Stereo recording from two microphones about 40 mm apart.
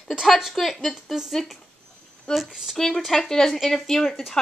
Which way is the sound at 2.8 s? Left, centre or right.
Centre.